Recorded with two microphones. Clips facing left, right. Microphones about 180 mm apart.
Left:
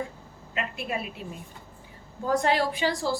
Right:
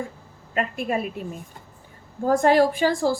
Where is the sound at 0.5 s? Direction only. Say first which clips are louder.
Right 7 dB; 45° right (ahead or behind).